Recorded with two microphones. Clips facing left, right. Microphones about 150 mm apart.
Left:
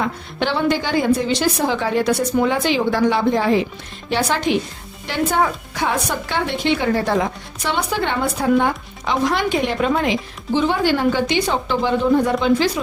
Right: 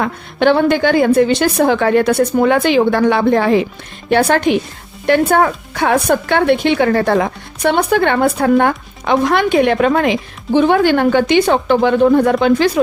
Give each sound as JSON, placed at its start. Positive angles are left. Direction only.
{"t": 0.0, "sound": "a woman's voice", "side_deg": -55}